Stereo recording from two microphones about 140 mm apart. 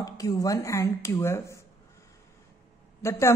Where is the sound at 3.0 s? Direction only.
20° left (ahead or behind).